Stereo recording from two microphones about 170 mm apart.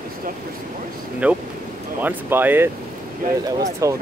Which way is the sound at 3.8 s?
20° right (ahead or behind).